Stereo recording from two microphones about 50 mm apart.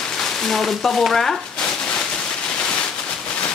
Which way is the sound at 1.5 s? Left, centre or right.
Centre.